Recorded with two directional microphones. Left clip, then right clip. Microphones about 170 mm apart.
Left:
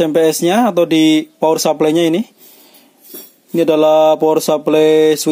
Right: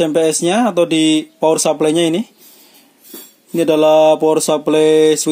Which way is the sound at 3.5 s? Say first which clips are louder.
Even; 15° left (ahead or behind).